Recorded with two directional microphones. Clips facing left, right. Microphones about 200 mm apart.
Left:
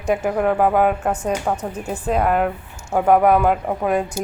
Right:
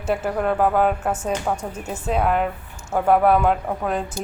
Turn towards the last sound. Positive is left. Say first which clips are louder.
# left 3 dB
turn(degrees=5)  # may be behind; listen again after turning